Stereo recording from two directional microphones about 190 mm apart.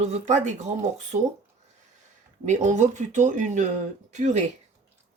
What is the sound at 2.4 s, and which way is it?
A woman's voice, 40° right (ahead or behind).